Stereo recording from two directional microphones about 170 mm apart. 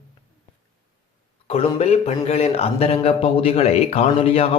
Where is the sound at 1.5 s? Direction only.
35° left (ahead or behind).